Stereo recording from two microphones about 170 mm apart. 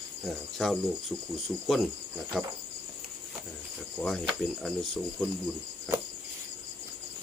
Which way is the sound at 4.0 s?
Centre (ahead or behind).